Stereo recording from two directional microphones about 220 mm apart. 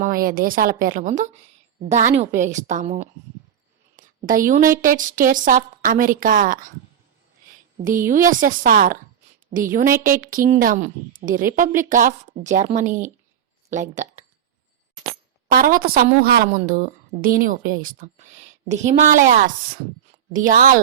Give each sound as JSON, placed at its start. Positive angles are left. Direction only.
{"t": 0.0, "sound": "a woman's voice", "side_deg": -40}
{"t": 7.8, "sound": "a woman's voice", "side_deg": -40}
{"t": 15.4, "sound": "a woman's voice", "side_deg": -40}